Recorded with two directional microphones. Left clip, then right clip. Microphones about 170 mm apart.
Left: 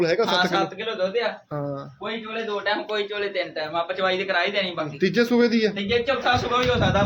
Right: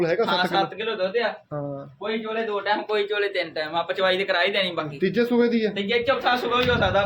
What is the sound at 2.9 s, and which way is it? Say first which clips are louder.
A man's voice: right 2 dB; 35° right (ahead or behind).